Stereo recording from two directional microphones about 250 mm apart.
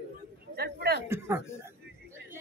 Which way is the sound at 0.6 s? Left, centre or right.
Right.